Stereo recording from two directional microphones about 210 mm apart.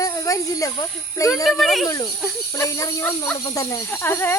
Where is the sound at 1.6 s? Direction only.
Centre (ahead or behind).